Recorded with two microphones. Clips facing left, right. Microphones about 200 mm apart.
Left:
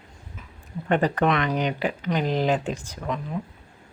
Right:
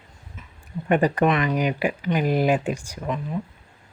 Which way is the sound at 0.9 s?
10° right (ahead or behind).